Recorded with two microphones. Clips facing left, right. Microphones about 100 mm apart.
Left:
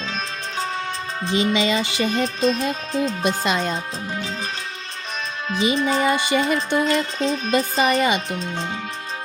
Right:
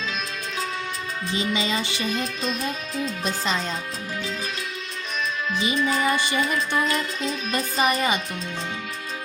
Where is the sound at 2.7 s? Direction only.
30° left (ahead or behind).